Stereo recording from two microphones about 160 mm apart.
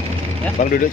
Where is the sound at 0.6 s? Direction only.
50° left (ahead or behind).